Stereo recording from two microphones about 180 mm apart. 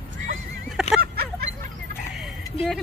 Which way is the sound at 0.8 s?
5° right (ahead or behind).